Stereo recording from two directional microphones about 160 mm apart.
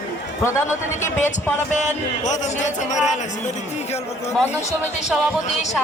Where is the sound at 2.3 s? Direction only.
50° left (ahead or behind).